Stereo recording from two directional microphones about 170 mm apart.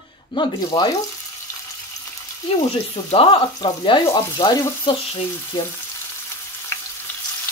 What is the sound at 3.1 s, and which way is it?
Speech, 30° left (ahead or behind).